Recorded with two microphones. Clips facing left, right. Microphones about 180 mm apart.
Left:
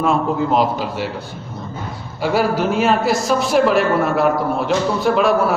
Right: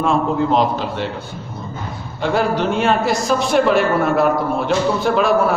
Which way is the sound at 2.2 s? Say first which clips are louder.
Even; 5° left (ahead or behind).